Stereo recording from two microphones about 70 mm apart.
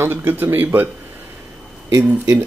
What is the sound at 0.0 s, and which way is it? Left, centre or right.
Speech, right.